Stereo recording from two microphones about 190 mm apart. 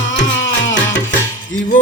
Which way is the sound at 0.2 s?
70° left (ahead or behind).